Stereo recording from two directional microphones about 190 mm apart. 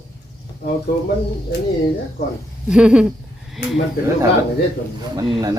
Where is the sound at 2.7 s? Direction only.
5° right (ahead or behind).